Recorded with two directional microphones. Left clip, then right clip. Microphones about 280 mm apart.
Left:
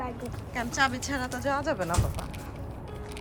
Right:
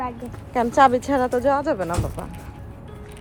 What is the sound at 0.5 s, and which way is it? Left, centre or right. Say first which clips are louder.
Speech: right 12 dB; centre.